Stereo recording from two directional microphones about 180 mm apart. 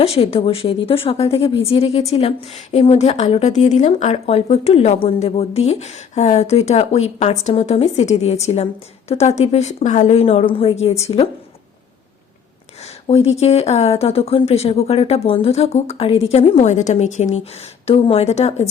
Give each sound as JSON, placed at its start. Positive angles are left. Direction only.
{"t": 0.0, "sound": "speech", "side_deg": 35}
{"t": 13.1, "sound": "speech", "side_deg": 35}